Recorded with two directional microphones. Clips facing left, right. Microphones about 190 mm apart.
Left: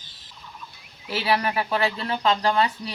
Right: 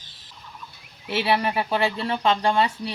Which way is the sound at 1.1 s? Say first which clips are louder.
Right 1 dB; 25° right (ahead or behind).